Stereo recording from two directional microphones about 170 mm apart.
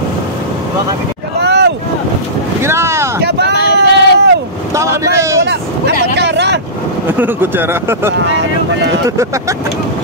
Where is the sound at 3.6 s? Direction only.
80° left.